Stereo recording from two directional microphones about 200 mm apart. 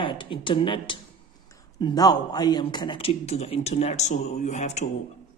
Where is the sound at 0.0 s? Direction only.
25° left (ahead or behind).